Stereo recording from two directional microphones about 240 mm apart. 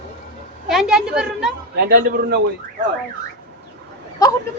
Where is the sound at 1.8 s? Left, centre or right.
Right.